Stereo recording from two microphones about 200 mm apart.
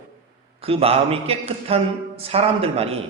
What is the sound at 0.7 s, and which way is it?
Speech, 30° right (ahead or behind).